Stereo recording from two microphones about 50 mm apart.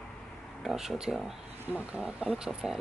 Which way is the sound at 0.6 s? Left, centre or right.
Centre.